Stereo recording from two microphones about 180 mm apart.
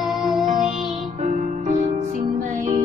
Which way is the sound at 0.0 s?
Centre (ahead or behind).